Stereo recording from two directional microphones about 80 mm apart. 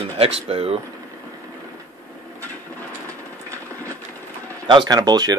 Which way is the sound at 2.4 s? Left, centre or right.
Left.